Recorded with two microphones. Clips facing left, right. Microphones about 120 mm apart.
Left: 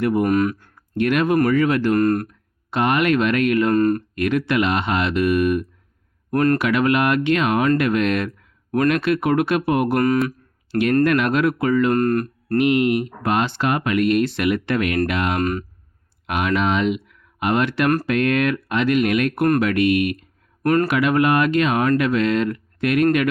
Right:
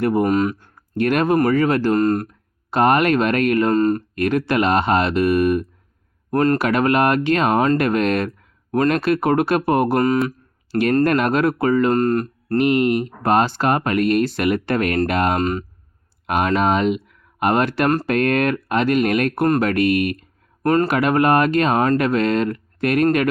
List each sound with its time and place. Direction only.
0.0 s speech: 35° right (ahead or behind)
0.3 s speech: 25° right (ahead or behind)
0.9 s speech: 40° right (ahead or behind); by 2.3 s 25° right (ahead or behind)
2.6 s speech: 40° right (ahead or behind)
3.7 s speech: 25° right (ahead or behind)
4.1 s speech: 40° right (ahead or behind)
6.6 s speech: 40° right (ahead or behind)
10.2 s a sound: 40° right (ahead or behind)
11.0 s speech: 40° right (ahead or behind)
12.5 s speech: 40° right (ahead or behind)
15.4 s speech: 25° right (ahead or behind)
16.2 s speech: 40° right (ahead or behind)
20.6 s speech: 30° right (ahead or behind)
20.9 s speech: 40° right (ahead or behind)